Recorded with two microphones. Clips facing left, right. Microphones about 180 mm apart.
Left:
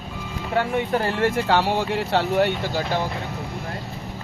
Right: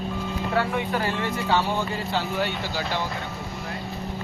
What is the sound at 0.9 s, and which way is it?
Speech, 50° left (ahead or behind).